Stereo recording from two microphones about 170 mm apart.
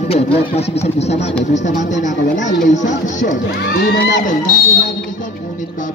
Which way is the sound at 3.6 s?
80° left.